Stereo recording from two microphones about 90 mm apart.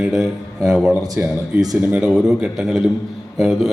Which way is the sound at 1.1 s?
45° right (ahead or behind).